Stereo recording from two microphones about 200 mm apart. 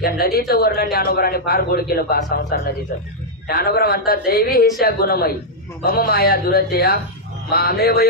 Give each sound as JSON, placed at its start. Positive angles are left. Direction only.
{"t": 0.0, "sound": "speech", "side_deg": 50}